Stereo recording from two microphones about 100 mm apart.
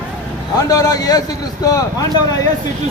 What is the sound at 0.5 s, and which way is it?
Speech, 35° left (ahead or behind).